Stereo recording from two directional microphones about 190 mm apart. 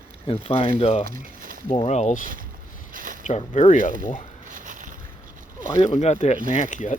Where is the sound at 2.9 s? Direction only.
45° right (ahead or behind).